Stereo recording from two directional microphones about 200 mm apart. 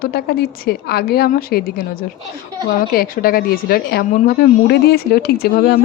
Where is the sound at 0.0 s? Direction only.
50° left (ahead or behind).